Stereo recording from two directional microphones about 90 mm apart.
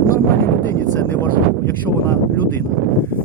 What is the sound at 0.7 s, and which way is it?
Speech, 25° left (ahead or behind).